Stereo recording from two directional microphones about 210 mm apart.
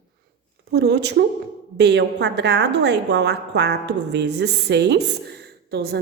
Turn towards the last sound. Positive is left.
turn(degrees=-50)  # may be behind; listen again after turning